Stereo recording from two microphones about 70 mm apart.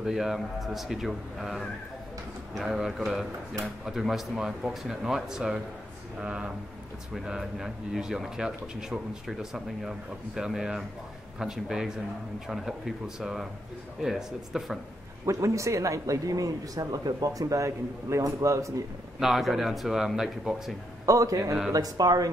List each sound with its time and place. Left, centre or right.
0.0 s speech: centre
15.2 s speech: right
19.1 s speech: centre
21.0 s a man's voice: right
21.7 s speech: right